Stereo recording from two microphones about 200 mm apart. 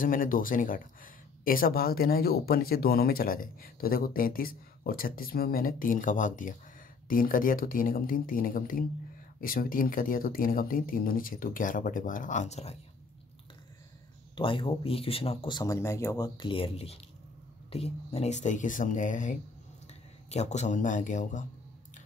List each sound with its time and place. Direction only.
0.0 s speech: 45° left (ahead or behind)
14.3 s speech: 25° left (ahead or behind)